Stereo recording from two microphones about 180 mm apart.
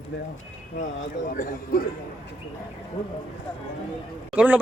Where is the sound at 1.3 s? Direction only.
55° left (ahead or behind).